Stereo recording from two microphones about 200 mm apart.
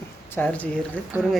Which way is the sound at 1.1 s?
10° right (ahead or behind).